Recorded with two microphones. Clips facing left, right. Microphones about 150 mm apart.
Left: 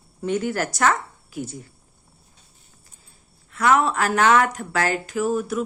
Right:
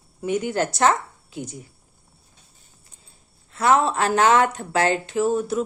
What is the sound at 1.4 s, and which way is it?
Speech, 15° right (ahead or behind).